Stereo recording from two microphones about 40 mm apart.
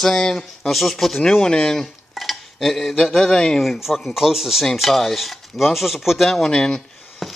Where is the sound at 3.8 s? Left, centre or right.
Centre.